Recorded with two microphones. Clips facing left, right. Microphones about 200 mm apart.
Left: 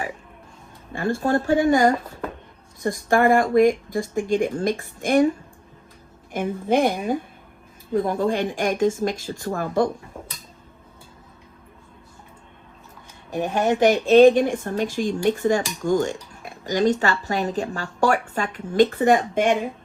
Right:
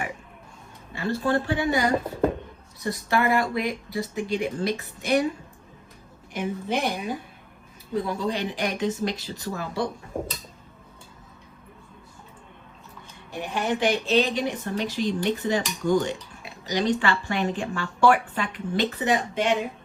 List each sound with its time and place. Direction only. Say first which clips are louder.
0.9 s speech: left 3 dB; 50° left (ahead or behind)
6.3 s speech: left 6 dB; 50° left (ahead or behind)
13.3 s speech: left 6 dB; 45° left (ahead or behind)